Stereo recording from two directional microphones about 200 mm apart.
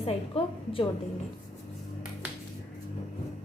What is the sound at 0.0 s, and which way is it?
Speech, 30° left (ahead or behind).